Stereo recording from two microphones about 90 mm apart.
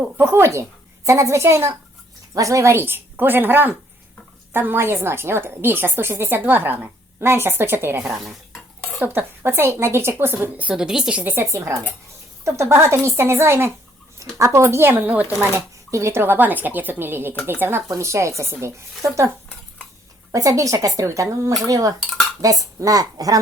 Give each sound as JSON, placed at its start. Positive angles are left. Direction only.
{"t": 0.0, "sound": "a woman's voice", "side_deg": -25}
{"t": 8.0, "sound": "speech", "side_deg": 0}
{"t": 9.0, "sound": "a woman's voice", "side_deg": -20}
{"t": 11.3, "sound": "a woman's voice", "side_deg": -35}
{"t": 15.4, "sound": "a woman's voice", "side_deg": -30}
{"t": 20.3, "sound": "speech", "side_deg": -35}